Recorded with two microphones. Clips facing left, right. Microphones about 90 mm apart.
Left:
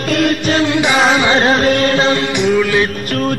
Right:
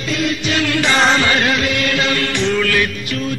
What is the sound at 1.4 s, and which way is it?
Music, 35° left (ahead or behind).